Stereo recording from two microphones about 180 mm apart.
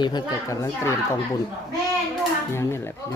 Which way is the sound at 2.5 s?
15° left (ahead or behind).